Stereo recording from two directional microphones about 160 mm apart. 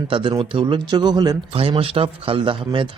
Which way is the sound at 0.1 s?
30° right (ahead or behind).